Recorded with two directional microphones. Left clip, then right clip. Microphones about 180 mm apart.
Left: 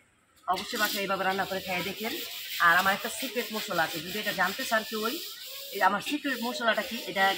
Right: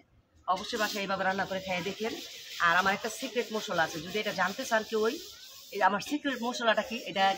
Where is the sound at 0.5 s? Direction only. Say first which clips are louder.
Left 2 dB; 20° right (ahead or behind).